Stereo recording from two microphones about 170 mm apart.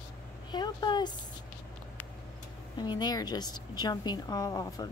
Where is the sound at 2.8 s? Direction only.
25° left (ahead or behind).